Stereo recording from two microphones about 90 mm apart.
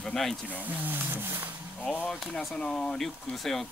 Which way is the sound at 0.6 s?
20° right (ahead or behind).